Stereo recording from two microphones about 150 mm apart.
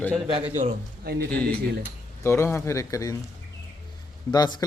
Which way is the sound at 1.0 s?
90° right.